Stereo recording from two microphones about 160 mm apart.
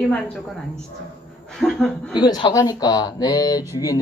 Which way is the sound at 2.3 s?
30° left (ahead or behind).